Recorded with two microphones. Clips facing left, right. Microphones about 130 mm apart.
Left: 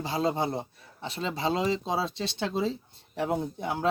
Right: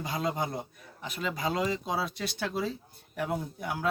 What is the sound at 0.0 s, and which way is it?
A man's voice, 30° left (ahead or behind).